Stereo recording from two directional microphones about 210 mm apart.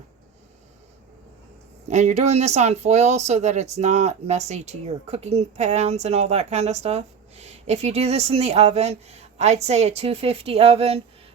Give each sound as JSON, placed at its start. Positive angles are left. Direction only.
{"t": 1.9, "sound": "speech", "side_deg": -35}